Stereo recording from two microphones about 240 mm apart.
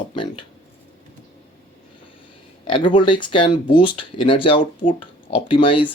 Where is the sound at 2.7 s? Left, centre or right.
Centre.